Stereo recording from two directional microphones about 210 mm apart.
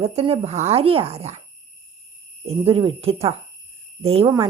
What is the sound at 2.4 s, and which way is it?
Speech, 30° right (ahead or behind).